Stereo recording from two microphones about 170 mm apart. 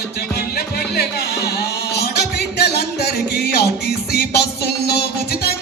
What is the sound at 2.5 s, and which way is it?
Music, 75° left (ahead or behind).